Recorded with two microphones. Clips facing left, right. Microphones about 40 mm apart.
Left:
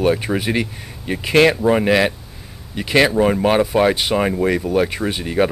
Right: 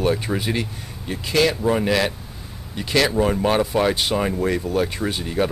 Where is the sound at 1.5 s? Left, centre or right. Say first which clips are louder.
Left 4 dB; left.